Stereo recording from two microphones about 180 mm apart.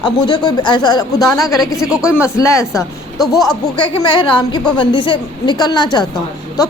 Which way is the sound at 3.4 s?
25° left (ahead or behind).